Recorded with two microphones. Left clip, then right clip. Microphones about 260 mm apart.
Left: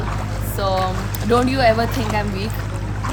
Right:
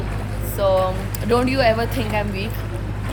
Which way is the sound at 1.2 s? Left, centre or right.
Left.